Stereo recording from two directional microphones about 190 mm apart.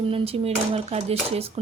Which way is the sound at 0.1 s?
30° right (ahead or behind).